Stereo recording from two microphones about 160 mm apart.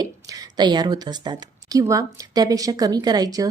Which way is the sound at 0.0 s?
25° right (ahead or behind).